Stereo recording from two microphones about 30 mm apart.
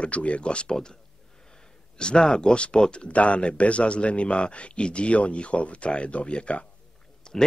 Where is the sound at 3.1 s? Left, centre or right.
Left.